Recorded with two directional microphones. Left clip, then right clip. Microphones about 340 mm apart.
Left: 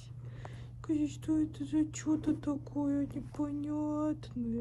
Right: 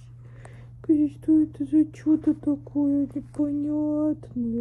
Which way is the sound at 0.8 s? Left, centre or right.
Centre.